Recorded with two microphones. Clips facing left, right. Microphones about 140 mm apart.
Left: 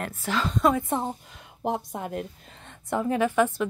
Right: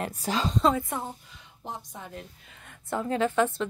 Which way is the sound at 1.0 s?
50° left (ahead or behind).